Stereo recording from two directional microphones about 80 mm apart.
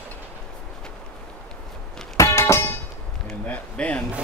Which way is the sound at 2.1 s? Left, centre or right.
Left.